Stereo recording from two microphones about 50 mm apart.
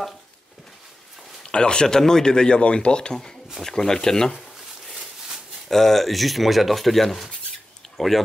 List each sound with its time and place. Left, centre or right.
1.5 s speech: centre
5.7 s speech: centre